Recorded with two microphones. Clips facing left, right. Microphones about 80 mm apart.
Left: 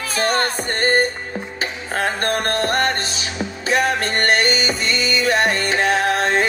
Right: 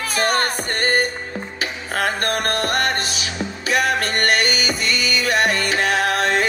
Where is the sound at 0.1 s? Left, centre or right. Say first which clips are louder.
Left 1 dB; left.